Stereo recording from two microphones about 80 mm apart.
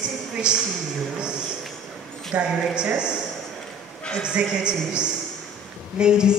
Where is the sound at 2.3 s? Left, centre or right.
Centre.